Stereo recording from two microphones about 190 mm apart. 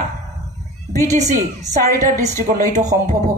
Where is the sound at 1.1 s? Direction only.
35° right (ahead or behind).